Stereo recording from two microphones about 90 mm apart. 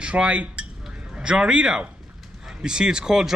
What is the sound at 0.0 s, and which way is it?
Cutlery, 10° right (ahead or behind).